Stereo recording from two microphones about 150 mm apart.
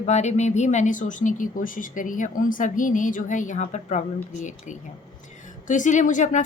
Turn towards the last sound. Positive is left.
turn(degrees=55)  # may be behind; listen again after turning